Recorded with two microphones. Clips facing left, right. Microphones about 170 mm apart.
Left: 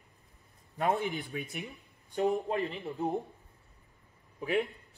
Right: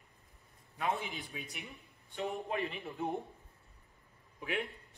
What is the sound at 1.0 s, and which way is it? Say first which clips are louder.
Speech: left 8 dB; 60° left (ahead or behind).